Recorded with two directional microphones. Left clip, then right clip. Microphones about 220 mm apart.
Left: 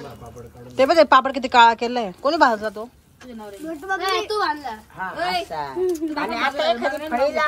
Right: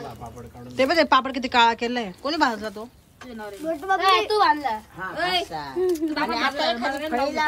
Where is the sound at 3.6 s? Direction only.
25° right (ahead or behind).